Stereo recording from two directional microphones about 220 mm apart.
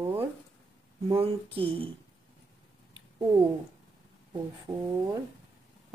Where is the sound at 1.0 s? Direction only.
25° right (ahead or behind).